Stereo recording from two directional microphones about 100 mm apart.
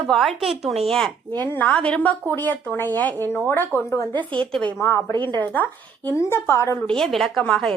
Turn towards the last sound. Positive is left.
turn(degrees=5)  # may be behind; listen again after turning